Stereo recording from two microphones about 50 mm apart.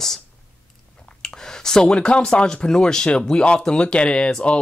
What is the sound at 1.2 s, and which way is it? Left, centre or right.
Speech, centre.